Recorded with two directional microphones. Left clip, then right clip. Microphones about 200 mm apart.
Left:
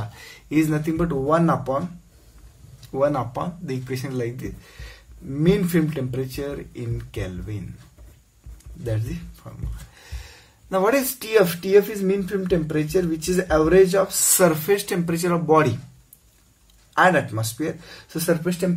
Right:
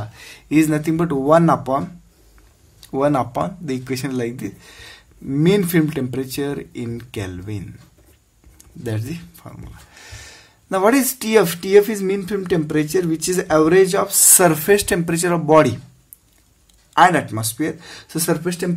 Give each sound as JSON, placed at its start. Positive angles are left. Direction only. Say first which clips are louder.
{"t": 0.2, "sound": "speech", "louder": "right 5 dB", "side_deg": -40}
{"t": 2.9, "sound": "speech", "louder": "right 4 dB", "side_deg": -50}
{"t": 8.8, "sound": "speech", "louder": "right 2 dB", "side_deg": -50}
{"t": 16.9, "sound": "speech", "louder": "right 4 dB", "side_deg": -50}